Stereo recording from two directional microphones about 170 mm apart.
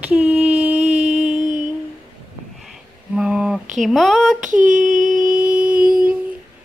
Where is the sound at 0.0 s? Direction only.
5° right (ahead or behind).